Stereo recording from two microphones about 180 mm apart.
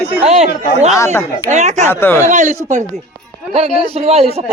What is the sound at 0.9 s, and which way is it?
Speech, 15° left (ahead or behind).